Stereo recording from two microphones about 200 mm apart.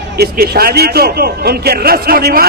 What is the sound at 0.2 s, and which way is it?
A man's voice, 50° right (ahead or behind).